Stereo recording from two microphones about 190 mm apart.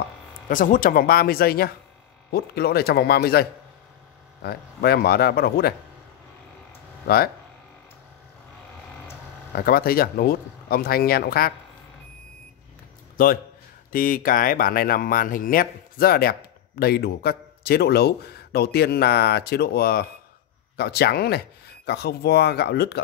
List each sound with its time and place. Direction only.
0.5 s a man's voice: 45° left (ahead or behind)
7.1 s speech: 50° left (ahead or behind)
9.5 s speech: 50° left (ahead or behind)
13.2 s a man's voice: 50° left (ahead or behind)